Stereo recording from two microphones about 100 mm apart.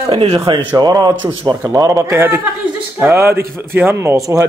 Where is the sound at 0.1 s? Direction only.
70° right (ahead or behind); by 1.6 s 45° right (ahead or behind).